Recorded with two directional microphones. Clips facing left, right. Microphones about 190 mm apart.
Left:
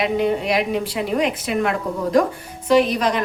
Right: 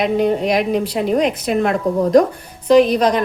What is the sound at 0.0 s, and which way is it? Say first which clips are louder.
A woman's voice: right 3 dB; 40° right (ahead or behind).